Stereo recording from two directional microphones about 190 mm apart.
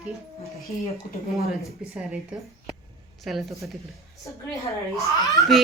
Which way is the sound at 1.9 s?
5° right (ahead or behind).